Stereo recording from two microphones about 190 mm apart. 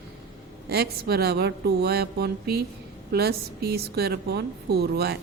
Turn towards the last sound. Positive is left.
turn(degrees=-55)  # may be behind; listen again after turning